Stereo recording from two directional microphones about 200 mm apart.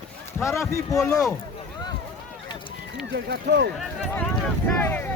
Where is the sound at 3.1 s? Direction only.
60° right (ahead or behind).